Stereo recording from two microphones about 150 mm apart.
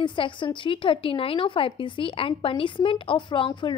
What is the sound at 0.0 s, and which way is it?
A woman's voice, 35° left (ahead or behind).